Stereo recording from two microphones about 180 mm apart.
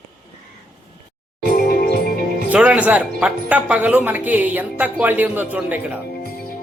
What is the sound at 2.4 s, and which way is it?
Speech, 10° right (ahead or behind).